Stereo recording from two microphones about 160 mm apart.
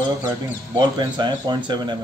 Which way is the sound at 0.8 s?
30° right (ahead or behind).